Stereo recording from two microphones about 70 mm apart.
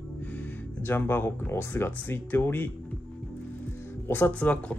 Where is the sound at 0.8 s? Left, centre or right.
Left.